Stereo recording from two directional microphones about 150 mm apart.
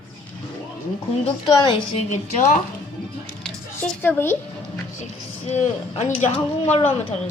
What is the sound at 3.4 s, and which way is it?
Speech, 10° left (ahead or behind).